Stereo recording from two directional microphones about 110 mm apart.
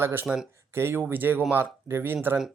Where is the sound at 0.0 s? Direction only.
20° right (ahead or behind).